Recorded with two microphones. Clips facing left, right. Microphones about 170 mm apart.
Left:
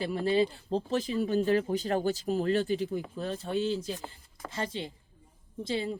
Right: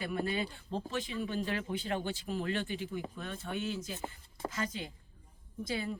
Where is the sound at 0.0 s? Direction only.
30° left (ahead or behind).